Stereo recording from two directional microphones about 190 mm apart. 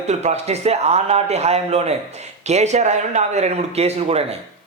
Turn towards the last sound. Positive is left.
turn(degrees=-30)  # may be behind; listen again after turning